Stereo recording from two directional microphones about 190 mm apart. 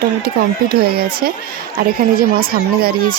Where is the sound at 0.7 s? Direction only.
55° right (ahead or behind).